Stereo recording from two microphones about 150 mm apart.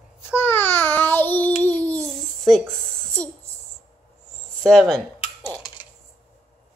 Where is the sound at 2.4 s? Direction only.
5° left (ahead or behind).